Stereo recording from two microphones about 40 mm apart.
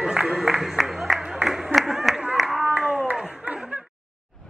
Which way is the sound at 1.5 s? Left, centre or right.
Centre.